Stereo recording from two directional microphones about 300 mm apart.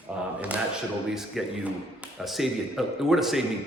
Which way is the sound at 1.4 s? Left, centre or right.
Centre.